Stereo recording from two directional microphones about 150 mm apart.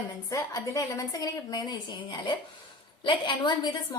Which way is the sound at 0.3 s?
20° left (ahead or behind).